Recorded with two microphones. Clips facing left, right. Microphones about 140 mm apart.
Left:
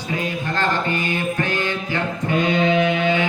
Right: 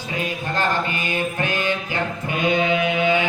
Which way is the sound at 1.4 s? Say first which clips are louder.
Even; 15° right (ahead or behind).